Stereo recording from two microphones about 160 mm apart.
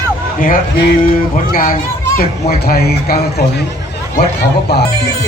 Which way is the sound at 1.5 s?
60° left (ahead or behind).